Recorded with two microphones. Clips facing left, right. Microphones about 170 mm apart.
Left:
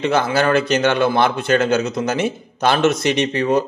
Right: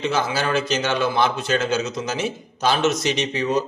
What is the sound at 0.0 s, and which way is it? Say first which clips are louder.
Speech: left 5 dB; 55° left (ahead or behind).